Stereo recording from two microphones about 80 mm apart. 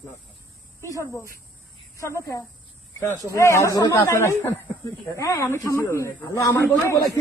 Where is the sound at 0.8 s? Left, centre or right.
Left.